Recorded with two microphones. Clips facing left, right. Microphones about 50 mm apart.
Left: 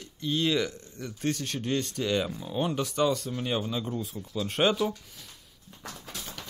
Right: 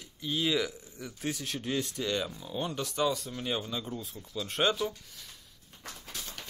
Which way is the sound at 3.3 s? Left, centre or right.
Centre.